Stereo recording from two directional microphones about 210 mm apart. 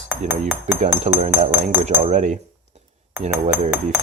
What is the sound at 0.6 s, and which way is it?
Cutlery, 35° right (ahead or behind).